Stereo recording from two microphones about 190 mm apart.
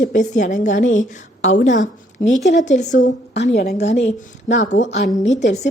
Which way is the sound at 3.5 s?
55° left (ahead or behind).